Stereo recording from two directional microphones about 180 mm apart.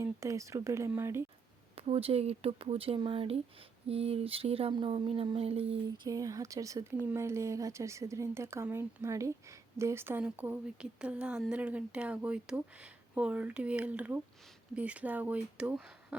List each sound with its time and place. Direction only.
0.0 s speech: 15° right (ahead or behind)
1.7 s a sound: 30° right (ahead or behind)
6.1 s speech: 20° right (ahead or behind)